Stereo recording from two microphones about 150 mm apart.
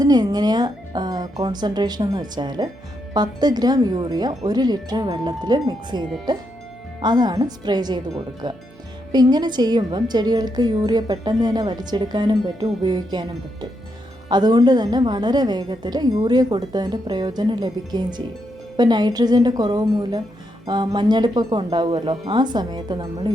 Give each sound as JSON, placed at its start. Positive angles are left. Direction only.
{"t": 0.0, "sound": "a woman's voice", "side_deg": -25}